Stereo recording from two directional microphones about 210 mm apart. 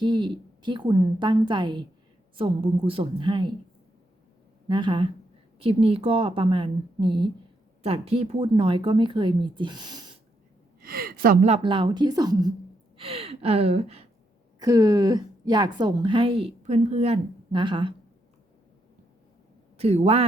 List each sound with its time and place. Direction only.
0.0 s a woman's voice: 20° right (ahead or behind)
4.7 s a woman's voice: 20° right (ahead or behind)
10.8 s speech: 45° right (ahead or behind)
11.4 s a woman's voice: 25° right (ahead or behind)
14.6 s a woman's voice: 20° right (ahead or behind)
19.8 s a woman's voice: 30° right (ahead or behind)